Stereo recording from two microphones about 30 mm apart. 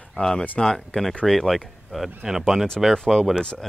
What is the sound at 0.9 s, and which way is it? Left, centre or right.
Speech, left.